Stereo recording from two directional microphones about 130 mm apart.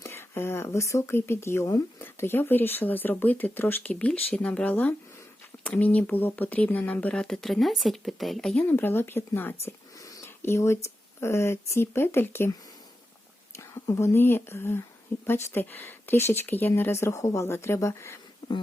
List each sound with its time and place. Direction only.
0.0 s speech: 20° left (ahead or behind); by 8.6 s 5° left (ahead or behind)
8.6 s speech: 15° left (ahead or behind)
13.6 s speech: 20° left (ahead or behind)